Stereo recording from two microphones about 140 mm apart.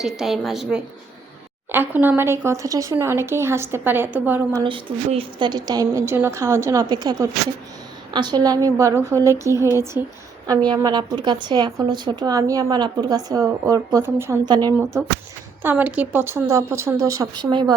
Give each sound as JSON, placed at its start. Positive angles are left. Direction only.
{"t": 0.0, "sound": "a woman's voice", "side_deg": 0}
{"t": 1.7, "sound": "speech", "side_deg": -15}
{"t": 4.6, "sound": "a woman's voice", "side_deg": -35}
{"t": 14.4, "sound": "a woman's voice", "side_deg": -30}
{"t": 15.6, "sound": "speech", "side_deg": -10}